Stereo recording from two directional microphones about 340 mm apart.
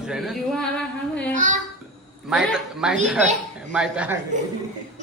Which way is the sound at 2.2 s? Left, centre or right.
Centre.